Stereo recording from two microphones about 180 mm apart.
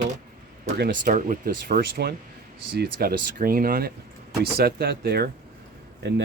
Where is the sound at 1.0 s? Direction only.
45° right (ahead or behind).